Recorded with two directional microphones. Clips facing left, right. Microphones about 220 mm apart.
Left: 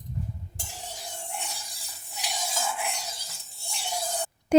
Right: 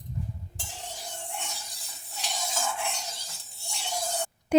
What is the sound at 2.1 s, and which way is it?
Stir, 10° left (ahead or behind).